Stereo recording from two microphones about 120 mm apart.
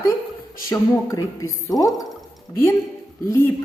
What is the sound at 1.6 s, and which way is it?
Speech, 30° left (ahead or behind).